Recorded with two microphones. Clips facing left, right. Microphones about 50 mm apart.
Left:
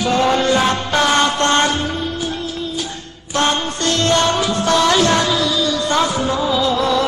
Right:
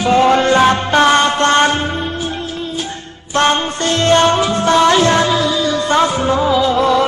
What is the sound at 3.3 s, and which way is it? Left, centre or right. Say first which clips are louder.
Music: right 4 dB; right.